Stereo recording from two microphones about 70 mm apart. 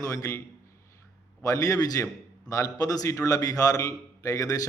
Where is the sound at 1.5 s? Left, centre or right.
Left.